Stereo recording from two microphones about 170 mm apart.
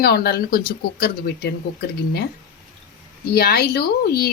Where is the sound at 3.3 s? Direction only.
65° left (ahead or behind).